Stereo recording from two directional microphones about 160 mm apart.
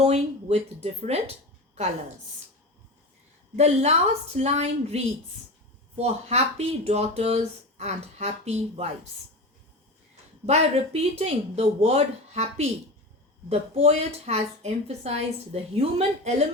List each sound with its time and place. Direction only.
0.0 s speech: 40° right (ahead or behind)
3.5 s a woman's voice: 45° right (ahead or behind)
6.0 s speech: 40° right (ahead or behind)
10.4 s a woman's voice: 40° right (ahead or behind)